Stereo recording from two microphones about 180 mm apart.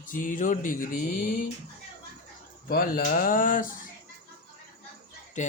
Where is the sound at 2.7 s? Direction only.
55° left (ahead or behind).